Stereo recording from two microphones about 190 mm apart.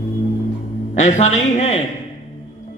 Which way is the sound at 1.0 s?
40° left (ahead or behind).